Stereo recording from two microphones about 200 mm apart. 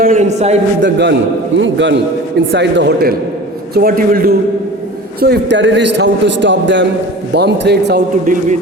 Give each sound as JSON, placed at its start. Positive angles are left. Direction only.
{"t": 0.0, "sound": "a man's voice", "side_deg": -40}
{"t": 0.8, "sound": "a man's voice", "side_deg": -60}
{"t": 5.2, "sound": "a man's voice", "side_deg": -55}